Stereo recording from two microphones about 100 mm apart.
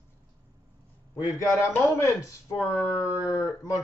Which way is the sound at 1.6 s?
30° left (ahead or behind).